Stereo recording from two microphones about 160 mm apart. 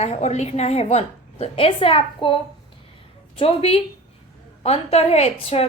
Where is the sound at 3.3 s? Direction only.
35° left (ahead or behind).